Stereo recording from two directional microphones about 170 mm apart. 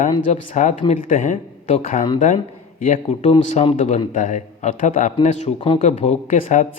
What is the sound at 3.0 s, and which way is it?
Speech, 35° left (ahead or behind).